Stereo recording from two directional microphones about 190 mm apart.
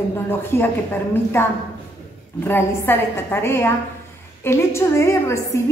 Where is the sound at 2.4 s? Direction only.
10° left (ahead or behind).